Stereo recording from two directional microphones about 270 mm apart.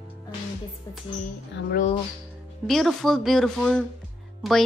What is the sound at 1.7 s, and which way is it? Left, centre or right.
Speech, left.